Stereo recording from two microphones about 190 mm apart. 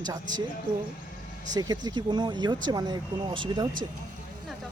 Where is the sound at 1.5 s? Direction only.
20° right (ahead or behind).